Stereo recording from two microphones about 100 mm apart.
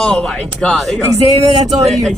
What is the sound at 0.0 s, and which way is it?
A man's voice, 10° left (ahead or behind).